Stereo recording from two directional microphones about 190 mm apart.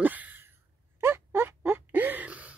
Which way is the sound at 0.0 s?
10° right (ahead or behind).